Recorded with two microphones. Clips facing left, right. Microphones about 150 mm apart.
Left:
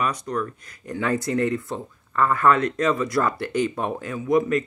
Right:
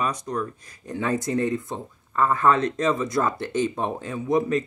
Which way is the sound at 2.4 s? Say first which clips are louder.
Left 2 dB; 55° left (ahead or behind).